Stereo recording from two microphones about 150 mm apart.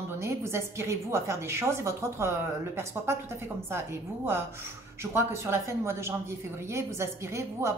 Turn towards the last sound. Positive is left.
turn(degrees=-15)  # may be behind; listen again after turning